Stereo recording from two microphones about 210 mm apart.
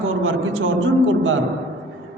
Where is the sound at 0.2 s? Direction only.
70° right (ahead or behind).